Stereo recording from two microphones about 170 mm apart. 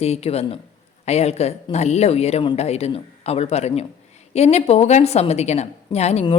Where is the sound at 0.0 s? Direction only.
40° left (ahead or behind).